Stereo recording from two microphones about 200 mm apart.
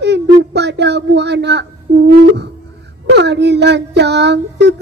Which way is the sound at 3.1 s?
60° right (ahead or behind).